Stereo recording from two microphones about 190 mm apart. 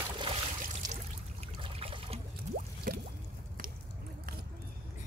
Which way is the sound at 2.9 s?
45° right (ahead or behind).